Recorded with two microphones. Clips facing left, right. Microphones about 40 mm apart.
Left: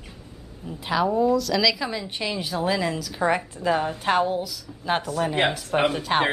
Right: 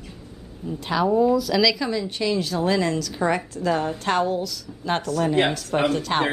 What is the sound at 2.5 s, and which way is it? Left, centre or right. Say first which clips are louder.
A woman's voice: left 1 dB; centre.